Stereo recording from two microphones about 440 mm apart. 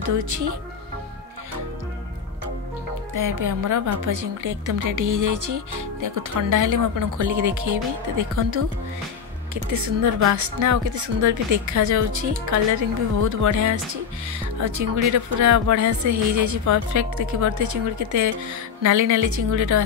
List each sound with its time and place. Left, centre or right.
0.1 s speech: right
3.2 s a woman's voice: right